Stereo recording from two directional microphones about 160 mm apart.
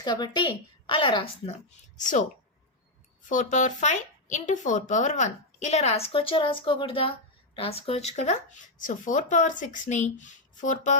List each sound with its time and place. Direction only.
0.0 s a woman's voice: 25° left (ahead or behind)
2.0 s speech: 50° left (ahead or behind)
3.2 s speech: 50° left (ahead or behind)